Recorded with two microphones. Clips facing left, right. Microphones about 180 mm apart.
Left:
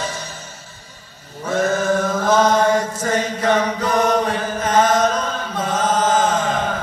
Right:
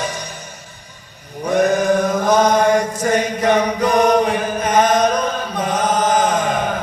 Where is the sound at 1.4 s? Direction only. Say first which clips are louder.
Right 4 dB; 15° right (ahead or behind).